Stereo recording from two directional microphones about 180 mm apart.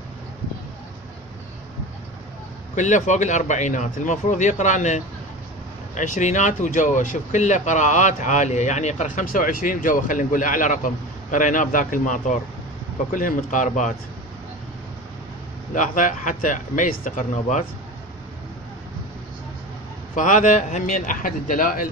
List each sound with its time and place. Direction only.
2.7 s speech: 40° left (ahead or behind)
15.7 s speech: 45° left (ahead or behind)
20.2 s speech: 45° left (ahead or behind)